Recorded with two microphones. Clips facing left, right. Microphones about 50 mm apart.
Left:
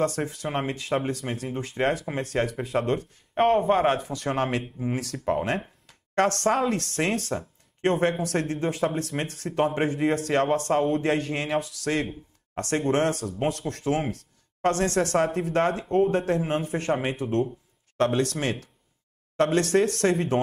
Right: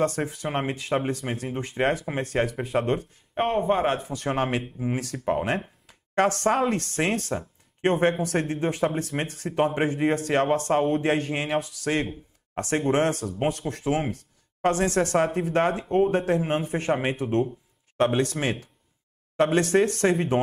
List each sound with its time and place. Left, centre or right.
0.0 s speech: centre
12.5 s speech: centre
15.0 s speech: centre